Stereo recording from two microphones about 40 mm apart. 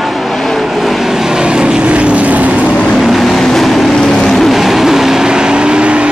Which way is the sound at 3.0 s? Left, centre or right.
Centre.